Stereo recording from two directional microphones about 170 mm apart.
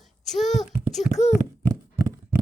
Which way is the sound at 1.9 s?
10° right (ahead or behind).